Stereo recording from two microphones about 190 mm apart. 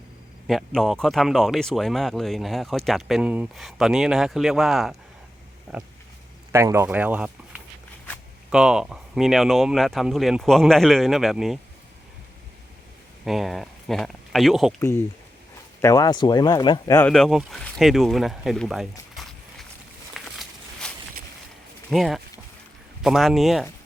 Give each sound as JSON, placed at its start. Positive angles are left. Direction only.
{"t": 0.4, "sound": "speech", "side_deg": 0}
{"t": 6.5, "sound": "speech", "side_deg": -15}
{"t": 13.2, "sound": "speech", "side_deg": 0}
{"t": 14.8, "sound": "speech", "side_deg": 15}
{"t": 17.1, "sound": "speech", "side_deg": 0}
{"t": 20.1, "sound": "a sound", "side_deg": 0}
{"t": 21.8, "sound": "speech", "side_deg": 0}